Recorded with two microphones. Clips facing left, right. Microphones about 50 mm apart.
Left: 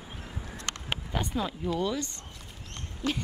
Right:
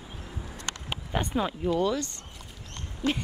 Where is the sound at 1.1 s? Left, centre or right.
Centre.